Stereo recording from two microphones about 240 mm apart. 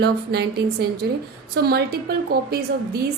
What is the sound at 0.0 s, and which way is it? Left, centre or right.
A woman's voice, right.